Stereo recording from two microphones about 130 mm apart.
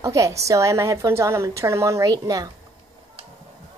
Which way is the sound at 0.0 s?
25° right (ahead or behind).